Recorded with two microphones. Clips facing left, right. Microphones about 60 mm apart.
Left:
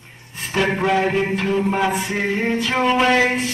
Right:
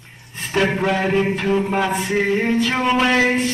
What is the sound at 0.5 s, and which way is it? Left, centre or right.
Music, centre.